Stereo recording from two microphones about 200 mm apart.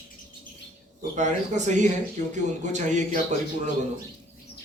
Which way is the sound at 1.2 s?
35° right (ahead or behind).